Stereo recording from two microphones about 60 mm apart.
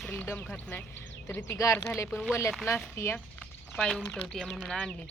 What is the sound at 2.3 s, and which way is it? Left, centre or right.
Speech, left.